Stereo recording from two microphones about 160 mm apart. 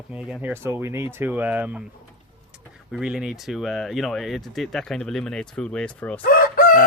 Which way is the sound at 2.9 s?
5° right (ahead or behind).